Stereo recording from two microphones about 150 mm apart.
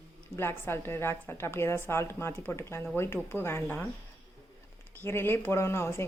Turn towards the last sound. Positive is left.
turn(degrees=20)  # may be behind; listen again after turning